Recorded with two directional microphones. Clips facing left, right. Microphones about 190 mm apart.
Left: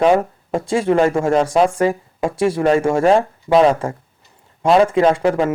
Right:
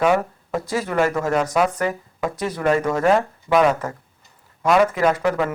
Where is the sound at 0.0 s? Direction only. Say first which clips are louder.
Left 4 dB; 30° left (ahead or behind).